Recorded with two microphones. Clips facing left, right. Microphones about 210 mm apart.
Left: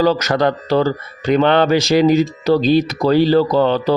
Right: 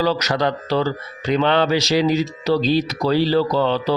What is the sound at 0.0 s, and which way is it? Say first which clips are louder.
Speech: left 5 dB; 50° left (ahead or behind).